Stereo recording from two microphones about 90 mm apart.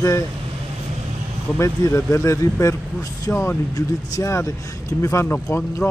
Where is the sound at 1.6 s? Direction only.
30° left (ahead or behind).